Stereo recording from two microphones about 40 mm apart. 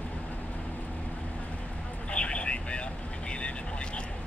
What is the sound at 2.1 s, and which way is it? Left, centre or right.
Vehicle, left.